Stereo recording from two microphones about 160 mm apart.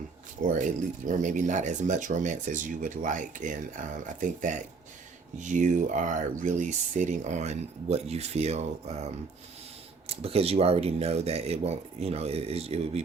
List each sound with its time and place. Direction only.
0.4 s speech: 55° right (ahead or behind)